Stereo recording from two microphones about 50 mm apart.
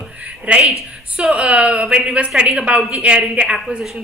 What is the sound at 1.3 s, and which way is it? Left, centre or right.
A woman's voice, right.